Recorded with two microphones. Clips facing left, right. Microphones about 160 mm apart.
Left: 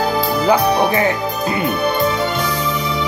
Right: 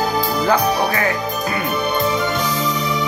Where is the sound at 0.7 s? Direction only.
25° left (ahead or behind).